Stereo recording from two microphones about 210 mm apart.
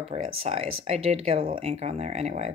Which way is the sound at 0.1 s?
30° right (ahead or behind).